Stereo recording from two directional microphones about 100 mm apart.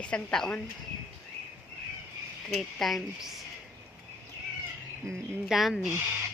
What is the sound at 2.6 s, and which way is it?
Speech, 5° left (ahead or behind).